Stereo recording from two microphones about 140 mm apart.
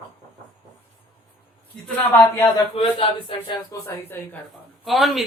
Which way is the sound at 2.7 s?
40° left (ahead or behind).